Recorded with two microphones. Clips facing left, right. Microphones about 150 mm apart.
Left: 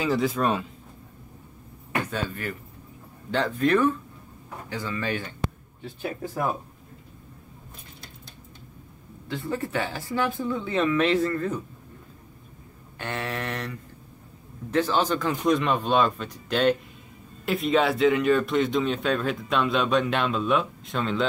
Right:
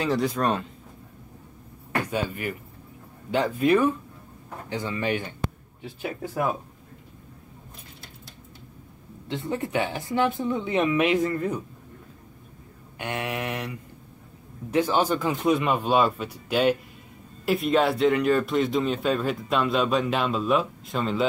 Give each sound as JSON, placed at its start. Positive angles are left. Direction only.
{"t": 0.0, "sound": "speech", "side_deg": 0}
{"t": 2.0, "sound": "speech", "side_deg": -10}
{"t": 4.6, "sound": "speech", "side_deg": -20}
{"t": 9.3, "sound": "speech", "side_deg": -20}
{"t": 13.0, "sound": "speech", "side_deg": -15}